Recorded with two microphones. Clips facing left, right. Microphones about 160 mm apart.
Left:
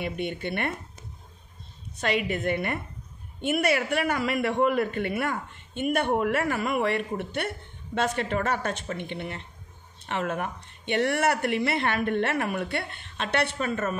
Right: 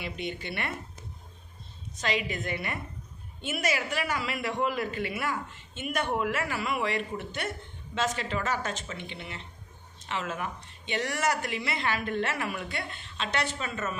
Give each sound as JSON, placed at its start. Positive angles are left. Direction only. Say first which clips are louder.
{"t": 0.0, "sound": "speech", "louder": "left 5 dB", "side_deg": 55}
{"t": 2.0, "sound": "a man's voice", "louder": "left 4 dB", "side_deg": 60}